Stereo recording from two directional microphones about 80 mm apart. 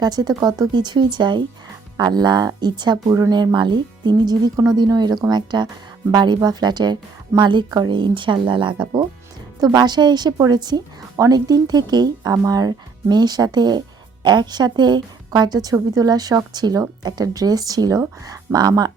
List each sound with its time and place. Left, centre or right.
0.0 s speech: right
3.1 s a woman's voice: right
9.6 s speech: right